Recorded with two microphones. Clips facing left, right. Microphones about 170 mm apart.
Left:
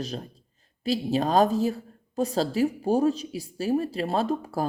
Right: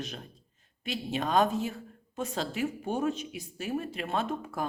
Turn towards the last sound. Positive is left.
turn(degrees=35)  # may be behind; listen again after turning